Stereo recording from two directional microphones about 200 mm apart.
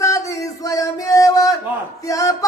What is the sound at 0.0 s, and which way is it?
Music, 15° left (ahead or behind).